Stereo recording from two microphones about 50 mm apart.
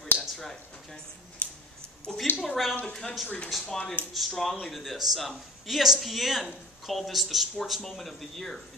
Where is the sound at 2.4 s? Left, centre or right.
Centre.